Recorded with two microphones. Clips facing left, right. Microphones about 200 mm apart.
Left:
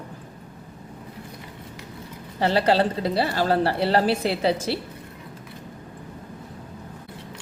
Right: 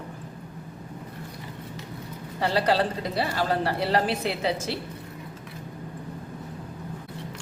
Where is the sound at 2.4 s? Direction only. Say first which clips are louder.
Left 3 dB; 25° left (ahead or behind).